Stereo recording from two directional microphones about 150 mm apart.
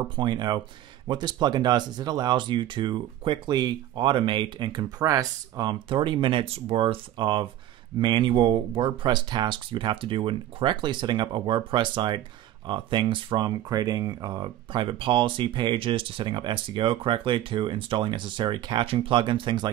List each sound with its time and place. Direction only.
0.1 s speech: 30° right (ahead or behind)